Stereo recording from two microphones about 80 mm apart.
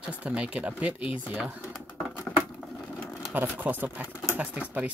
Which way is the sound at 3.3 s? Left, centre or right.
Right.